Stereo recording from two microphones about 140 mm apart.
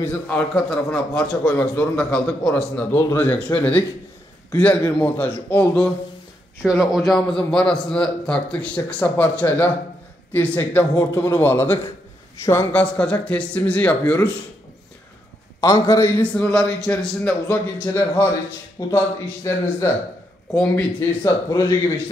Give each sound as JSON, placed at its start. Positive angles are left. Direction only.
{"t": 0.0, "sound": "a man's voice", "side_deg": 10}
{"t": 6.6, "sound": "a man's voice", "side_deg": 0}
{"t": 12.8, "sound": "a man's voice", "side_deg": 10}
{"t": 15.6, "sound": "a man's voice", "side_deg": 25}
{"t": 16.2, "sound": "a man's voice", "side_deg": 10}
{"t": 17.9, "sound": "a man's voice", "side_deg": 20}
{"t": 21.2, "sound": "a man's voice", "side_deg": 25}